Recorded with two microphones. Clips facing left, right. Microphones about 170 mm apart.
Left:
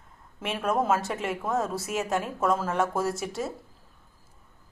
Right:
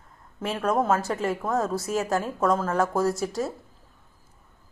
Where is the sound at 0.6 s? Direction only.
5° left (ahead or behind).